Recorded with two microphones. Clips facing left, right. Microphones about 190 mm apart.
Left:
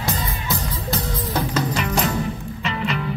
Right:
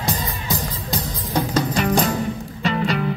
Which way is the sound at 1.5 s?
35° right (ahead or behind).